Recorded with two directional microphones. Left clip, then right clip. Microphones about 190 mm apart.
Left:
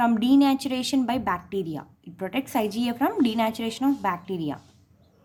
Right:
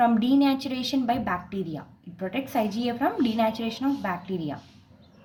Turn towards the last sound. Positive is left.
turn(degrees=30)  # may be behind; listen again after turning